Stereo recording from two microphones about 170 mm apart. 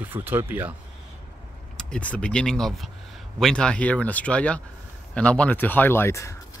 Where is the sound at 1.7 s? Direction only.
5° left (ahead or behind).